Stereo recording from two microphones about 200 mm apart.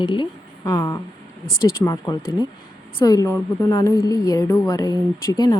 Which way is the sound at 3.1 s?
15° left (ahead or behind).